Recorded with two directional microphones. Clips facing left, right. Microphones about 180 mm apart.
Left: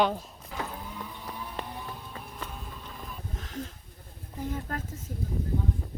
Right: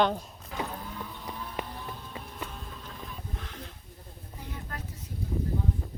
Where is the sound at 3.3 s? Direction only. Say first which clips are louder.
Left 4 dB; 40° left (ahead or behind).